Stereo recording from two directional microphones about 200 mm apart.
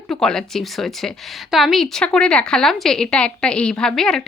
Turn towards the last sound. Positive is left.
turn(degrees=0)  # may be behind; listen again after turning